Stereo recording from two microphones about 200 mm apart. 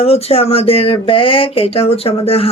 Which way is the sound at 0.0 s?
30° left (ahead or behind).